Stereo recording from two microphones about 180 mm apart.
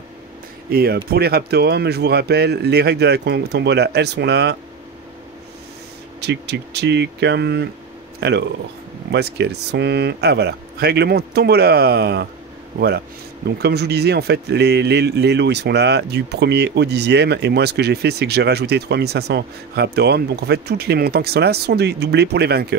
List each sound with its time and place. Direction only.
0.7 s speech: 60° right (ahead or behind)
6.2 s speech: 70° right (ahead or behind)